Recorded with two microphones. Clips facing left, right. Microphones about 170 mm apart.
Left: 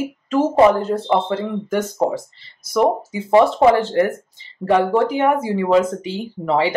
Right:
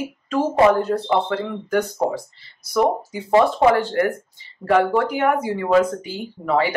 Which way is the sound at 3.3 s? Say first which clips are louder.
Left 2 dB; 20° left (ahead or behind).